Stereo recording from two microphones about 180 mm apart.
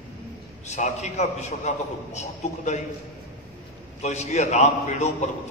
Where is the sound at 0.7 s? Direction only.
40° left (ahead or behind).